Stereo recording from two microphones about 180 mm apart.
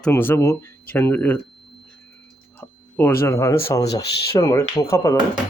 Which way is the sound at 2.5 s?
10° left (ahead or behind).